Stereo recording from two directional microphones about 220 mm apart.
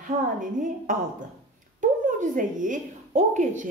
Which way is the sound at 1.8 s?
35° right (ahead or behind).